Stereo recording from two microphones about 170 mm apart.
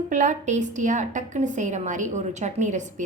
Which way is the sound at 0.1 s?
45° right (ahead or behind).